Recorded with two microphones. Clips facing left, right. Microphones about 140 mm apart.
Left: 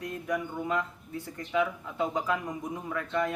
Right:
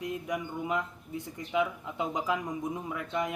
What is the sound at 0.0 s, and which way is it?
Speech, 15° right (ahead or behind).